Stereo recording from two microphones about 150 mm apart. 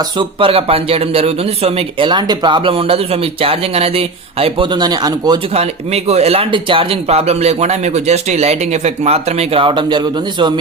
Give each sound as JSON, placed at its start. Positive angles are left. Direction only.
{"t": 0.2, "sound": "speech", "side_deg": -35}
{"t": 5.5, "sound": "speech", "side_deg": -45}